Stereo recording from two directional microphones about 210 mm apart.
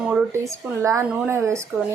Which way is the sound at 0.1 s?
10° right (ahead or behind).